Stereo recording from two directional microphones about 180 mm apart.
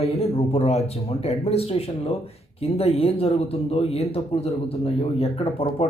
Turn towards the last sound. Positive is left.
turn(degrees=35)  # may be behind; listen again after turning